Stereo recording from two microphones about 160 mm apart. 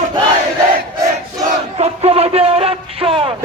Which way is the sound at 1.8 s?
40° right (ahead or behind).